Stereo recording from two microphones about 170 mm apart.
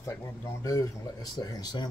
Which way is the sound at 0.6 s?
20° left (ahead or behind).